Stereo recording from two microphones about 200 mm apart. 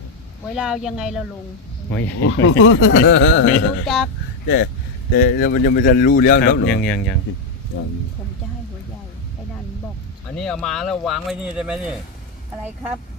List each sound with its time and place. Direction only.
0.5 s speech: centre (ahead or behind)
1.9 s speech: 10° left (ahead or behind)
2.2 s speech: 80° left; by 3.8 s 65° left (ahead or behind)
3.8 s speech: centre (ahead or behind)
4.4 s speech: 55° left (ahead or behind)
10.3 s speech: 5° left (ahead or behind)